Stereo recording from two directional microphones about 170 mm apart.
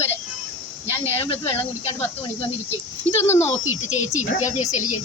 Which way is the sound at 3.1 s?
35° left (ahead or behind).